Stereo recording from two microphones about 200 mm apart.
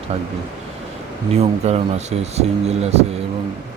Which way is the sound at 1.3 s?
30° right (ahead or behind).